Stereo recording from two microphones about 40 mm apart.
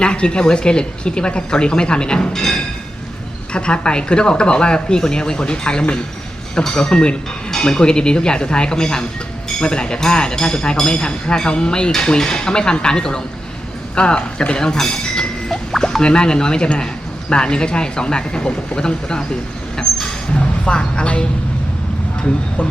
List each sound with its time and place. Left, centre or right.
0.0 s speech: left
2.3 s music: centre
3.5 s speech: left
20.7 s speech: left